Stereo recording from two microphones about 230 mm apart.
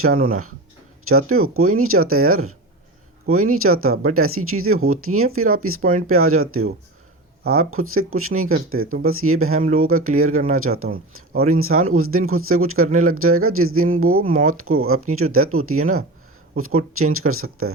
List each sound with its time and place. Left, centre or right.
0.0 s speech: right